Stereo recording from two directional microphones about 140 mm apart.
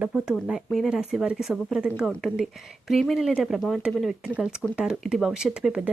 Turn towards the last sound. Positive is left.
turn(degrees=-5)  # may be behind; listen again after turning